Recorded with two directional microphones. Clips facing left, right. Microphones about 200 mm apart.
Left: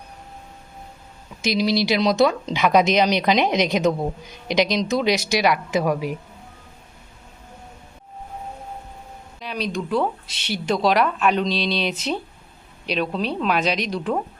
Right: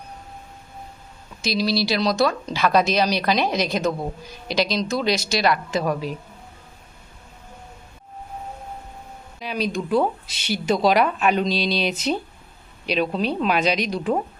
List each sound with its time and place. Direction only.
1.4 s a woman's voice: 15° left (ahead or behind)
9.4 s speech: centre (ahead or behind)